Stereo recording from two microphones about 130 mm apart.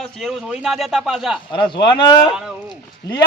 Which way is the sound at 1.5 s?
40° left (ahead or behind).